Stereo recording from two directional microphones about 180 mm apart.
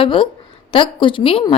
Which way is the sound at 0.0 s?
30° left (ahead or behind).